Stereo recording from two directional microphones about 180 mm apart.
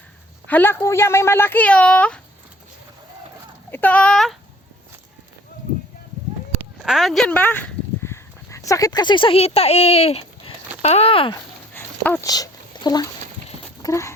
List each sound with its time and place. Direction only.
0.4 s speech: 10° left (ahead or behind)
3.7 s speech: 10° left (ahead or behind)
6.8 s speech: centre (ahead or behind); by 11.3 s 30° left (ahead or behind)
11.7 s dog: 10° left (ahead or behind)
13.8 s a sound: 15° left (ahead or behind)